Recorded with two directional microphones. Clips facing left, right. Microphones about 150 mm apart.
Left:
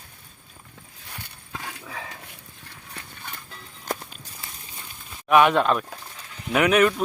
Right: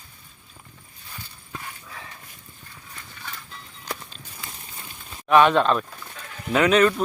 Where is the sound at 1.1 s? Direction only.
65° left (ahead or behind); by 2.2 s 90° left.